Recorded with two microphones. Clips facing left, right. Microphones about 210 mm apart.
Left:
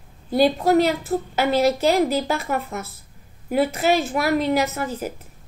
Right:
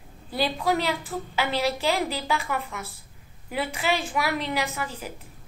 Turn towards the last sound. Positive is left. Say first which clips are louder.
# left 7 dB
turn(degrees=45)  # may be behind; listen again after turning